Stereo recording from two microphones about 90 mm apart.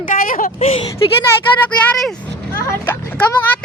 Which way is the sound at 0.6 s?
90° left.